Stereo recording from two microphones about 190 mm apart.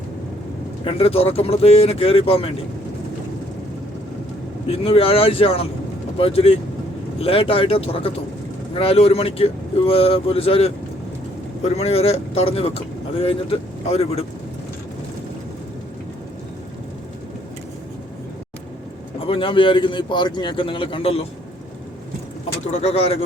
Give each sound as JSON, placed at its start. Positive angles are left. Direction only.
{"t": 0.9, "sound": "speech", "side_deg": 30}
{"t": 4.7, "sound": "a man's voice", "side_deg": 30}
{"t": 19.2, "sound": "a man's voice", "side_deg": 30}
{"t": 22.6, "sound": "speech", "side_deg": 35}